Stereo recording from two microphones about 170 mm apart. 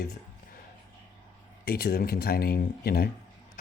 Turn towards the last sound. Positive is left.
turn(degrees=65)  # may be behind; listen again after turning